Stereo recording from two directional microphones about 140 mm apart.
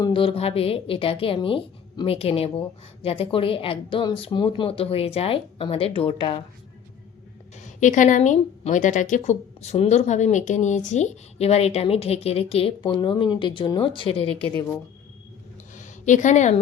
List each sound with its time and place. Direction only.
0.0 s a woman's voice: 40° left (ahead or behind)
7.6 s a woman's voice: 60° left (ahead or behind); by 14.4 s 45° left (ahead or behind)
15.7 s a sound: 60° left (ahead or behind)